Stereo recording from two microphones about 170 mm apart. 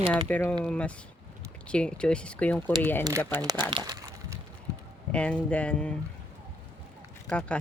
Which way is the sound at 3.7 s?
25° right (ahead or behind).